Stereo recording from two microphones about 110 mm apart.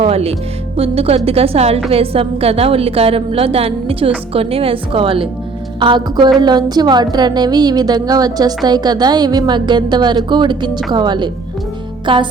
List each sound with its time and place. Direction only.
0.0 s a woman's voice: 65° right (ahead or behind)
5.8 s music: 45° right (ahead or behind)
6.4 s a woman's voice: 40° right (ahead or behind)
10.9 s music: 45° right (ahead or behind)